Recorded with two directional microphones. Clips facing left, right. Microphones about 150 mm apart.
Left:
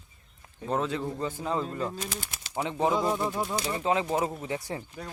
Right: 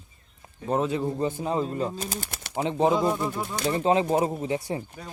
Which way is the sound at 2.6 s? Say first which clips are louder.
Right 4 dB; 20° right (ahead or behind).